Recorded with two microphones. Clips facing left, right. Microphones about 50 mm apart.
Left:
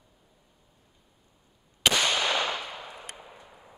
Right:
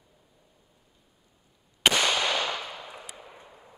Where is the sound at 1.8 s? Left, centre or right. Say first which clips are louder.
Right 1 dB; centre.